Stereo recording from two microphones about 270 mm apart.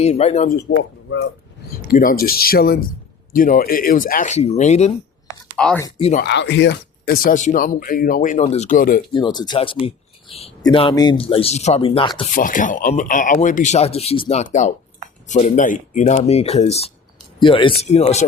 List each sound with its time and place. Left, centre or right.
0.0 s speech: left
0.8 s speech: left
1.9 s speech: left
5.5 s speech: centre
6.0 s speech: left
6.2 s speech: left
9.1 s speech: centre
12.3 s speech: left